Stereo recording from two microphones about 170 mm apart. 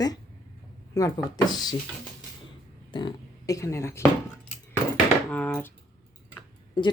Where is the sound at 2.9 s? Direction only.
25° left (ahead or behind).